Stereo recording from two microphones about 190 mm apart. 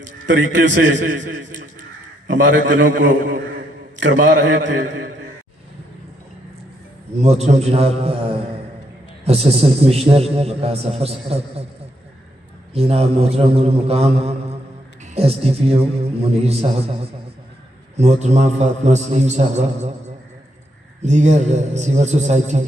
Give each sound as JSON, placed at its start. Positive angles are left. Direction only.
{"t": 0.3, "sound": "a man's voice", "side_deg": -70}
{"t": 7.2, "sound": "a man's voice", "side_deg": -35}
{"t": 12.7, "sound": "a man's voice", "side_deg": -30}